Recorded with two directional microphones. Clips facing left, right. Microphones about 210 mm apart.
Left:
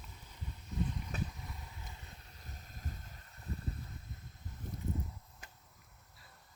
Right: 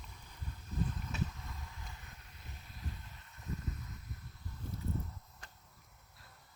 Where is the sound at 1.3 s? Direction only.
15° left (ahead or behind); by 3.9 s 35° left (ahead or behind).